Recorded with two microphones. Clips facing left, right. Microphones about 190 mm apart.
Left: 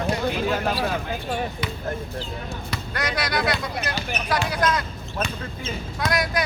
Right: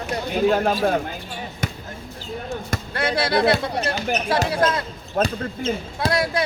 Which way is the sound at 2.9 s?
30° right (ahead or behind).